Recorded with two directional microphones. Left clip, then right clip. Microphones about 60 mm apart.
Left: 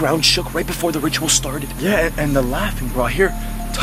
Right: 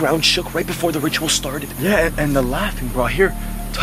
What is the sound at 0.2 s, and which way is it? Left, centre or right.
Speech, centre.